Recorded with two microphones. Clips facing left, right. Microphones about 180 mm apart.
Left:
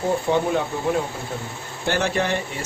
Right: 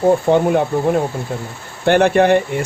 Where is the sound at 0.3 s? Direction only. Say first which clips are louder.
Right 5 dB; 50° right (ahead or behind).